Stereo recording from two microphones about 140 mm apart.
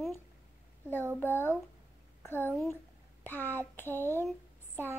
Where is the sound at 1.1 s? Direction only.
15° left (ahead or behind).